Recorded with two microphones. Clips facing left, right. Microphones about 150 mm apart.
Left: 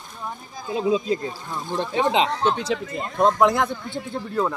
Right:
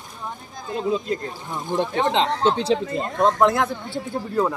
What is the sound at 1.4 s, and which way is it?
Speech, 15° right (ahead or behind).